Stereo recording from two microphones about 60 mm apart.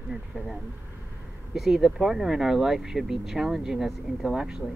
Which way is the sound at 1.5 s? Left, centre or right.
Centre.